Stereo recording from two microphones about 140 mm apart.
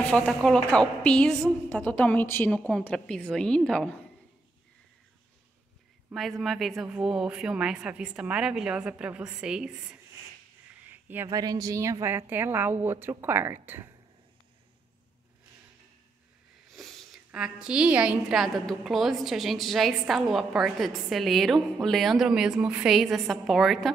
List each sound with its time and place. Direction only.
0.1 s a woman's voice: 5° left (ahead or behind)
6.1 s a woman's voice: centre (ahead or behind)
10.9 s a sound: 15° right (ahead or behind)
11.2 s a woman's voice: 25° right (ahead or behind)
16.7 s a woman's voice: centre (ahead or behind)